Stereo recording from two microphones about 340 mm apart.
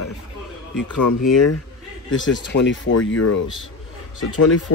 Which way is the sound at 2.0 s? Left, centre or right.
Left.